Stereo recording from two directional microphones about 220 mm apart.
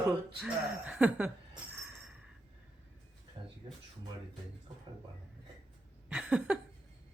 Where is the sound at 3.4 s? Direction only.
20° right (ahead or behind).